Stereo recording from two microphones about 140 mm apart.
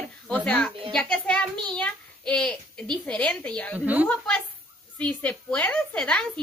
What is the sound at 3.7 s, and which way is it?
Speech, 10° right (ahead or behind).